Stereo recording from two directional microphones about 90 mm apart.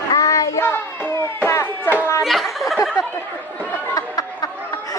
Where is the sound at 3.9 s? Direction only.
40° left (ahead or behind).